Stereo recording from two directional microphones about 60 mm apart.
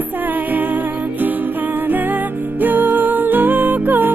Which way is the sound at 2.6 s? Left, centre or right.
Right.